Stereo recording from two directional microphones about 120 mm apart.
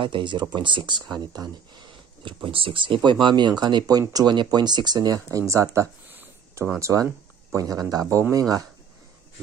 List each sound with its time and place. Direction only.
0.0 s speech: 40° right (ahead or behind)